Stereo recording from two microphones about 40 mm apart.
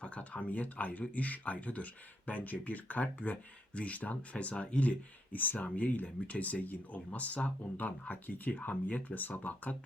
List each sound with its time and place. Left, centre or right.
0.0 s speech: left